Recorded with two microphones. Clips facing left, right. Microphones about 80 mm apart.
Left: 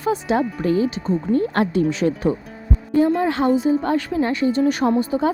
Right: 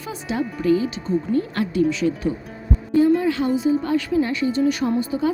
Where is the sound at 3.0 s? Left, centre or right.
Left.